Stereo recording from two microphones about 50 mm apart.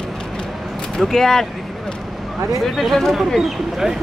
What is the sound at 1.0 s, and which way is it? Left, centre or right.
Speech, centre.